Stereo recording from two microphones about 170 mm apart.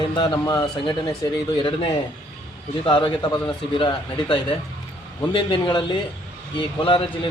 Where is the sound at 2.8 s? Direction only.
30° left (ahead or behind).